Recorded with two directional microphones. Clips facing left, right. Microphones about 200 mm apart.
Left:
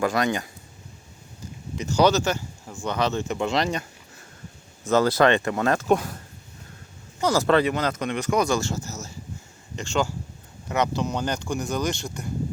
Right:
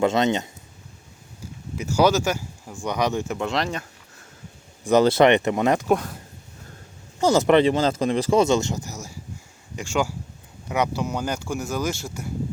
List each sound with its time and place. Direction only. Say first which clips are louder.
0.0 s speech: right 3 dB; 25° right (ahead or behind)
1.7 s speech: right 1 dB; 10° right (ahead or behind)
4.8 s speech: right 3 dB; 15° right (ahead or behind)
5.9 s speech: even; centre (ahead or behind)
7.2 s speech: right 3 dB; 20° right (ahead or behind); by 12.3 s 5° right (ahead or behind)